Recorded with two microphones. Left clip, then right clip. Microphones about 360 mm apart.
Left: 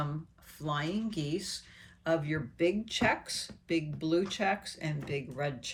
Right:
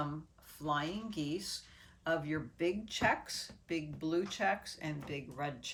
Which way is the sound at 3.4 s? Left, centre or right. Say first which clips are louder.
Left 6 dB; centre.